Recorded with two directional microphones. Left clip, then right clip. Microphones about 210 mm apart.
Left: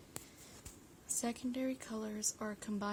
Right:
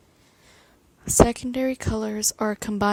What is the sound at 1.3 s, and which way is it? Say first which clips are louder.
Speech: right 14 dB; 45° right (ahead or behind).